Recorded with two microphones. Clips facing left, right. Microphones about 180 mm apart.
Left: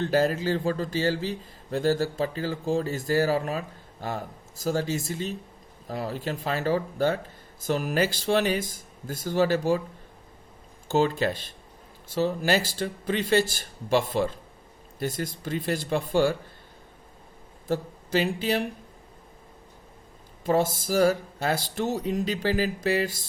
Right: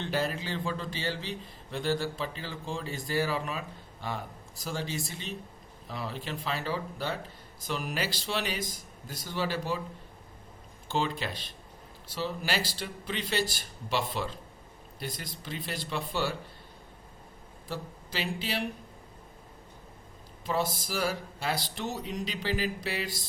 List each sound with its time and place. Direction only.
0.0 s speech: 40° left (ahead or behind)
4.6 s speech: 45° left (ahead or behind)
10.8 s speech: 45° left (ahead or behind)
17.7 s speech: 45° left (ahead or behind)
20.4 s speech: 45° left (ahead or behind)